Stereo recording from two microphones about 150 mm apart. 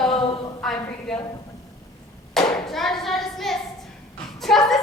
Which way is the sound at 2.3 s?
Centre (ahead or behind).